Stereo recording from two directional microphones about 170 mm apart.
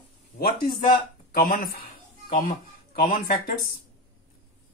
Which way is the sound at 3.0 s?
50° left (ahead or behind).